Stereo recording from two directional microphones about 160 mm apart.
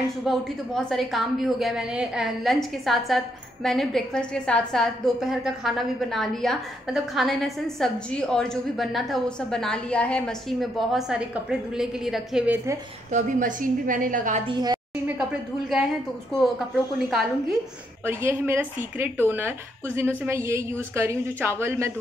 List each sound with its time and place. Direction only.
0.2 s a woman's voice: centre (ahead or behind)
13.1 s a woman's voice: 55° right (ahead or behind)
14.5 s a woman's voice: 25° right (ahead or behind)
16.3 s a woman's voice: centre (ahead or behind)
18.0 s speech: 15° right (ahead or behind)